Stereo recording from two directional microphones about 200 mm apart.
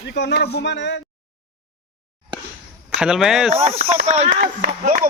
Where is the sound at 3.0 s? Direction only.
5° right (ahead or behind).